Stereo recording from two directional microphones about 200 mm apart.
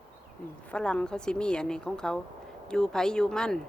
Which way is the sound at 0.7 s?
5° left (ahead or behind).